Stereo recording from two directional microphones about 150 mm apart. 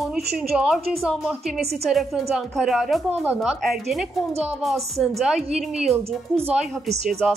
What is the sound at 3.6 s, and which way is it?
A woman's voice, centre (ahead or behind).